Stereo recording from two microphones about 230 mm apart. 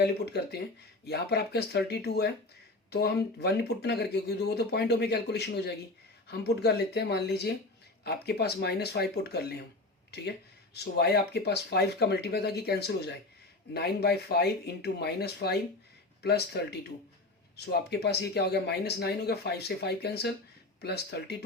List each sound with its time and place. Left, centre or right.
0.0 s speech: left
10.8 s speech: left
17.7 s speech: left